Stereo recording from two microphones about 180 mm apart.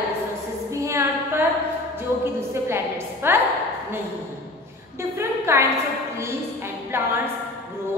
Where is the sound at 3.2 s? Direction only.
15° right (ahead or behind).